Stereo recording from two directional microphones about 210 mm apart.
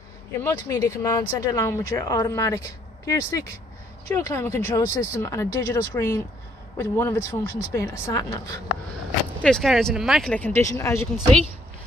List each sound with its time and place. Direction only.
0.4 s speech: 15° left (ahead or behind)
9.4 s speech: centre (ahead or behind)